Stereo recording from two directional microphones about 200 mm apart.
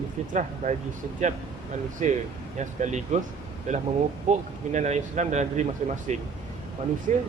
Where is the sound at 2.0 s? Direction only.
35° right (ahead or behind).